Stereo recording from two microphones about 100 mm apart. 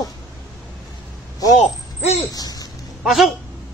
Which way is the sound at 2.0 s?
90° left.